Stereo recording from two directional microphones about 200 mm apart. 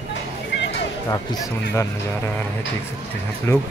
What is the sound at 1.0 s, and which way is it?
Speech, 15° left (ahead or behind).